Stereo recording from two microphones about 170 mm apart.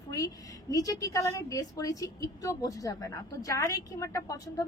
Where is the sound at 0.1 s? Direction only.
20° left (ahead or behind).